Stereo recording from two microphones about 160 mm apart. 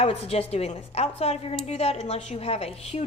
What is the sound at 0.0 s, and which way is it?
A woman's voice, 40° left (ahead or behind).